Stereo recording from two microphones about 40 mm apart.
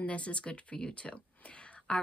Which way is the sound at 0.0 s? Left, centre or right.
Left.